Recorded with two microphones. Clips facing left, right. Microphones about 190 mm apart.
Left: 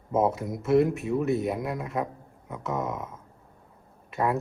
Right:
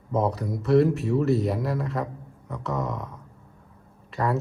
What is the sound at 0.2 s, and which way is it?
Speech, 25° left (ahead or behind).